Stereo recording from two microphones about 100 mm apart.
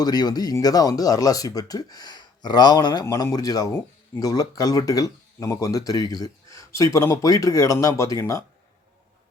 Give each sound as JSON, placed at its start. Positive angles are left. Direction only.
{"t": 0.0, "sound": "speech", "side_deg": 40}